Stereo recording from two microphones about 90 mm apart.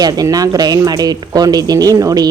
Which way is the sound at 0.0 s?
45° right (ahead or behind).